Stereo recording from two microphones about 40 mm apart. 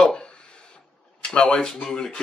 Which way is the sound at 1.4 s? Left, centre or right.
Left.